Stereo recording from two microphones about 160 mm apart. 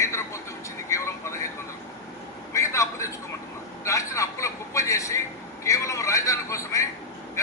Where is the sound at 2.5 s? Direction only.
20° left (ahead or behind).